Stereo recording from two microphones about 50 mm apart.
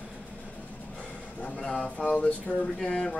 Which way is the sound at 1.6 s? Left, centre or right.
Centre.